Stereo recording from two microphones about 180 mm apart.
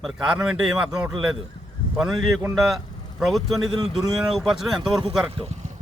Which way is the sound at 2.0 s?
Centre (ahead or behind).